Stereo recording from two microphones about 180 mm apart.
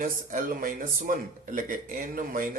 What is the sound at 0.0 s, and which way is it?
Speech, 50° right (ahead or behind).